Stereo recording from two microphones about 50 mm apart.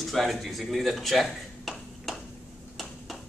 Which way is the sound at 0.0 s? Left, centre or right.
Centre.